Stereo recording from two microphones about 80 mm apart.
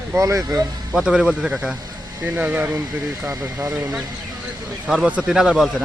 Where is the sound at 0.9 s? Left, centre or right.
Centre.